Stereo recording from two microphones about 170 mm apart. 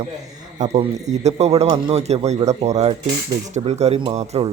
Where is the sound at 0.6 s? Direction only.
40° right (ahead or behind).